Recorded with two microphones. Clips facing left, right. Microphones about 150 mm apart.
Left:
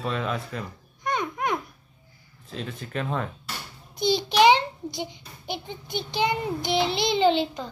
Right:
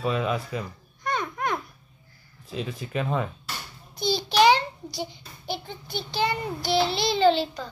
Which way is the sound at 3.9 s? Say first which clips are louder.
Left 1 dB; 20° left (ahead or behind).